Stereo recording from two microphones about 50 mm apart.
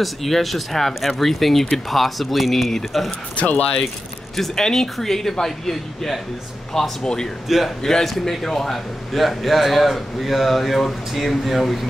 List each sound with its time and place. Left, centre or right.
0.0 s a man's voice: centre
3.3 s speech: left
4.4 s speech: centre
7.4 s a man's voice: centre
7.8 s a man's voice: centre